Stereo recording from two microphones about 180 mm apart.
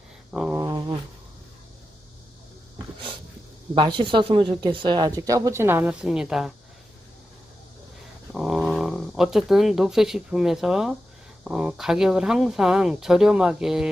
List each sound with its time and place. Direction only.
0.3 s speech: 5° right (ahead or behind)
0.6 s dog: 20° right (ahead or behind)
3.8 s speech: 25° right (ahead or behind); by 6.5 s 5° right (ahead or behind)
8.3 s speech: centre (ahead or behind)